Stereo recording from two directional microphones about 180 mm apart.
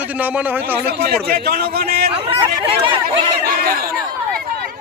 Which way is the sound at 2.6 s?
30° right (ahead or behind).